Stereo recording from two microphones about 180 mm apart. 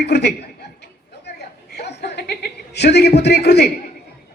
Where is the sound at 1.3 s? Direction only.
65° left (ahead or behind).